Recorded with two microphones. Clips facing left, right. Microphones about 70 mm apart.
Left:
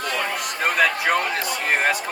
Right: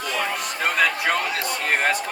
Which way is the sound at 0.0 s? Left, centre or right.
Left.